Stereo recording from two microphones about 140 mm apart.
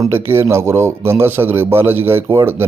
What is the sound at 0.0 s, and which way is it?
Speech, 15° right (ahead or behind).